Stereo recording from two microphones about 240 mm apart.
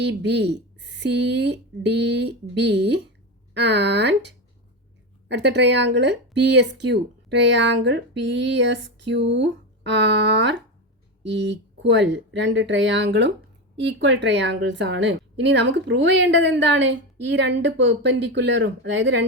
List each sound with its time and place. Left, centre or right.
0.0 s a woman's voice: right